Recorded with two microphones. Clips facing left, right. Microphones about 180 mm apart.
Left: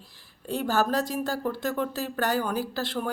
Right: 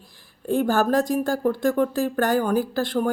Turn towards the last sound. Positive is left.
turn(degrees=-50)  # may be behind; listen again after turning